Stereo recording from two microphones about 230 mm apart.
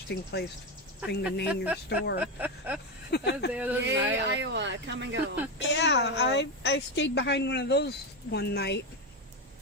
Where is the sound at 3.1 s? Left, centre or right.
Left.